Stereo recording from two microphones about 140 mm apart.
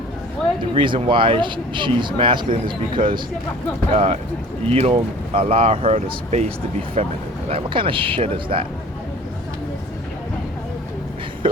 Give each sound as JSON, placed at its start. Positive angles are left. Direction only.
{"t": 0.7, "sound": "speech", "side_deg": -40}
{"t": 7.5, "sound": "speech", "side_deg": -35}